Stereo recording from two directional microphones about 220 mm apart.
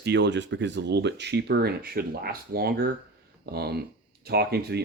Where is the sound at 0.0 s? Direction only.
50° right (ahead or behind).